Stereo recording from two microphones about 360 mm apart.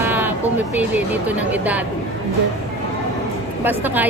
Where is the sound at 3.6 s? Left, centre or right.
Centre.